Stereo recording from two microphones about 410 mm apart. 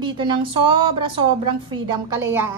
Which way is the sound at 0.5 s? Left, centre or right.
Right.